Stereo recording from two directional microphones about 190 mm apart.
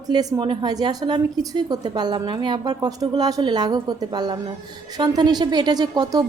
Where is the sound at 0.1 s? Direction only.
20° right (ahead or behind).